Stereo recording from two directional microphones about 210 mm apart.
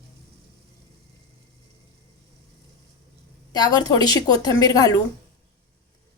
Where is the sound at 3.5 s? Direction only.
20° left (ahead or behind).